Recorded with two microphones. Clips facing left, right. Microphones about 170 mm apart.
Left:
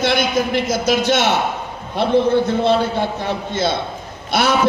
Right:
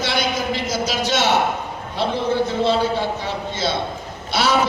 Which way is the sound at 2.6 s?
55° left (ahead or behind).